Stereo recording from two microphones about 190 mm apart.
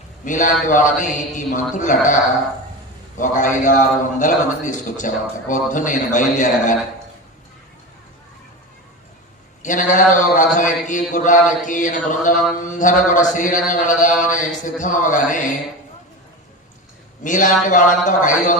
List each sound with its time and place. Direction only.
0.3 s a man's voice: 40° left (ahead or behind)
9.6 s a man's voice: 40° left (ahead or behind)
17.2 s a man's voice: 40° left (ahead or behind)